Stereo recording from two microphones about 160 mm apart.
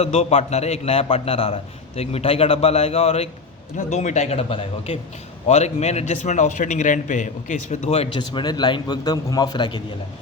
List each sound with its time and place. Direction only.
0.0 s a man's voice: 40° left (ahead or behind)